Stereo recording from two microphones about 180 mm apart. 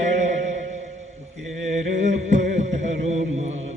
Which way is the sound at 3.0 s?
35° right (ahead or behind).